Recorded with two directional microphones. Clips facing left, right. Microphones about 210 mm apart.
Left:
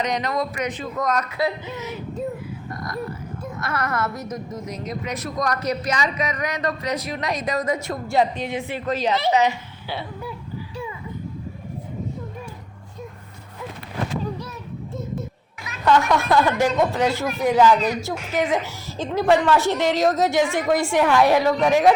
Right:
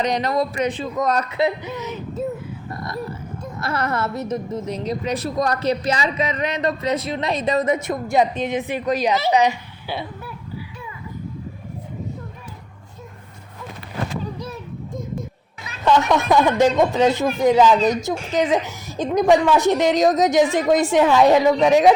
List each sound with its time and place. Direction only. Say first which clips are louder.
0.0 s a woman's voice: right 3 dB; 30° right (ahead or behind)
3.6 s a woman's voice: right 2 dB; 30° right (ahead or behind)
15.8 s a woman's voice: right 1 dB; 20° right (ahead or behind)